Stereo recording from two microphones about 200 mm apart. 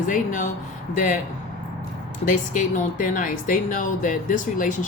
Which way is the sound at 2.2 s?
40° left (ahead or behind).